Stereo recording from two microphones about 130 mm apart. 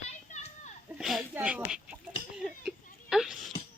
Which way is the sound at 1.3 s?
10° right (ahead or behind).